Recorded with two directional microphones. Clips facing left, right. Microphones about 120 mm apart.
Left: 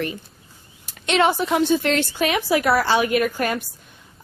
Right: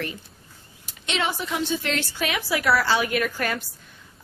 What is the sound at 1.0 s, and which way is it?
A woman's voice, 50° left (ahead or behind).